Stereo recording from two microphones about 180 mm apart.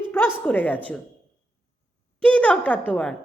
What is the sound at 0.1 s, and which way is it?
Speech, 10° left (ahead or behind).